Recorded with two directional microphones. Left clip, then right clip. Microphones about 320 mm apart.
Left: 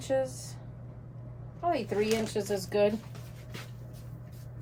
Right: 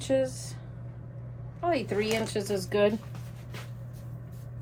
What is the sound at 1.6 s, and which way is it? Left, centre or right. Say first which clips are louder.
A woman's voice: right 1 dB; right.